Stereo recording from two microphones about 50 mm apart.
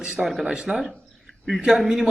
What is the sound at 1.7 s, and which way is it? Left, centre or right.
Speech, centre.